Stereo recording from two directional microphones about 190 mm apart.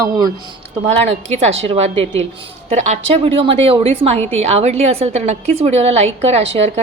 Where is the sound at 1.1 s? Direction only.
35° right (ahead or behind).